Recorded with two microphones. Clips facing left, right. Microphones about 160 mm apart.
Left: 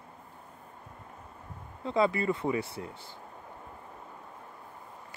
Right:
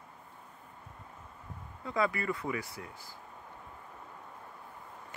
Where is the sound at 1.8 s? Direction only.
25° left (ahead or behind).